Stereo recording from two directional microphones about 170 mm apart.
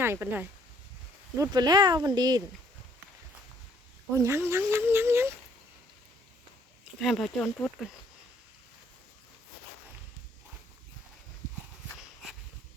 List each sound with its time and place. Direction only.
0.0 s speech: 15° right (ahead or behind)
1.4 s speech: 25° right (ahead or behind)
4.1 s speech: 15° right (ahead or behind)
7.0 s speech: centre (ahead or behind)